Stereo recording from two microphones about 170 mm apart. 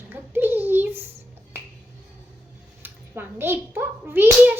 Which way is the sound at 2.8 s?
15° right (ahead or behind).